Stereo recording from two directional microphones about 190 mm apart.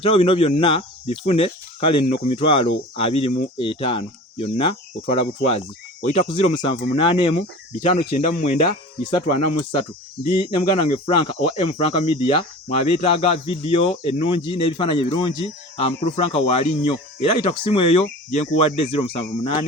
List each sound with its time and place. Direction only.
0.0 s speech: 30° left (ahead or behind)